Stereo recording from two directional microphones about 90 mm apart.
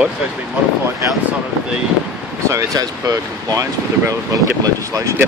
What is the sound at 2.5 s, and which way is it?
Speech, 35° right (ahead or behind).